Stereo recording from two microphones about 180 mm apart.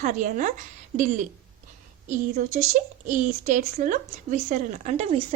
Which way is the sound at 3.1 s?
45° right (ahead or behind).